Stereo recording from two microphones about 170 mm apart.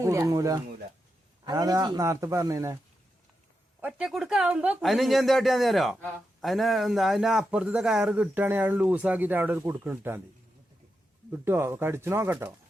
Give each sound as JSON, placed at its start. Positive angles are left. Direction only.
{"t": 0.0, "sound": "speech", "side_deg": -15}
{"t": 3.8, "sound": "speech", "side_deg": -5}
{"t": 11.3, "sound": "speech", "side_deg": -15}